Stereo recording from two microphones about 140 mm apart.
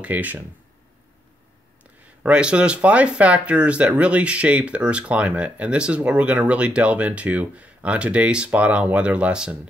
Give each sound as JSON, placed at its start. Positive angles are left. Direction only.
{"t": 0.0, "sound": "speech", "side_deg": -10}
{"t": 2.2, "sound": "speech", "side_deg": -10}